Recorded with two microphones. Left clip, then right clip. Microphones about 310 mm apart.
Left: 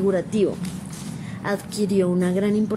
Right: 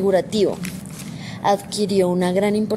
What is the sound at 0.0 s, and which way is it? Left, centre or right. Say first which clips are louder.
Speech: right 4 dB; right.